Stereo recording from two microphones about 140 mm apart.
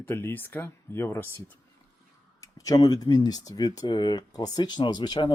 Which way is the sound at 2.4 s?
25° left (ahead or behind).